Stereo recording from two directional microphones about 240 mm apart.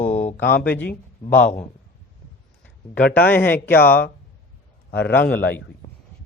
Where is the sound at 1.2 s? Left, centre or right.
Left.